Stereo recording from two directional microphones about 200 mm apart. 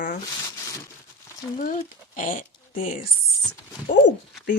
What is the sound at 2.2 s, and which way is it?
Speech, 45° left (ahead or behind).